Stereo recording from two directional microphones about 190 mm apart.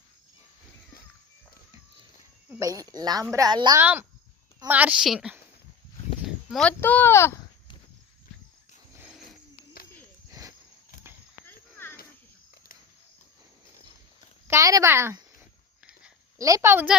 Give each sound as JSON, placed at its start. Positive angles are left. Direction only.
{"t": 2.5, "sound": "a woman's voice", "side_deg": -15}
{"t": 10.2, "sound": "cricket", "side_deg": -15}
{"t": 11.4, "sound": "clip-clop", "side_deg": 10}
{"t": 14.4, "sound": "speech", "side_deg": -15}
{"t": 16.4, "sound": "speech", "side_deg": -15}